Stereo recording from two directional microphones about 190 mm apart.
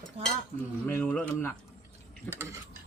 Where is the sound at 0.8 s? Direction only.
10° left (ahead or behind).